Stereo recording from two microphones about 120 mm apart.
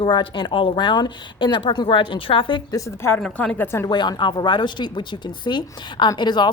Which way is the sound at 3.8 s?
35° left (ahead or behind).